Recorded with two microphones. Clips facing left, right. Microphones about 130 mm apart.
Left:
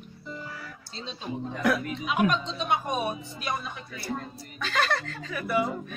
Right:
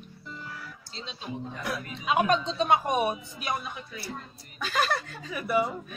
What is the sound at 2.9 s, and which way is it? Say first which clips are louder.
Speech: right 3 dB; 25° right (ahead or behind).